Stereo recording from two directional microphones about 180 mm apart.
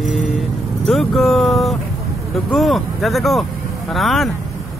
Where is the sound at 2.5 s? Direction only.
Centre (ahead or behind).